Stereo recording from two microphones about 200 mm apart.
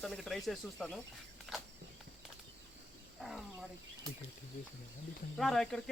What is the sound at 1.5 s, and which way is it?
Walk, centre (ahead or behind).